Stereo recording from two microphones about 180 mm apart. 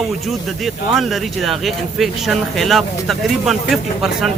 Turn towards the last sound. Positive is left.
turn(degrees=0)  # may be behind; listen again after turning